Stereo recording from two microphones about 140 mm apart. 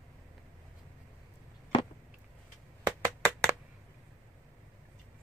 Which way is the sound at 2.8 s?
20° right (ahead or behind).